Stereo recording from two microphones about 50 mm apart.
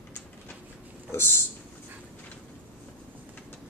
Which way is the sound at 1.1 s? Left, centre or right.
Left.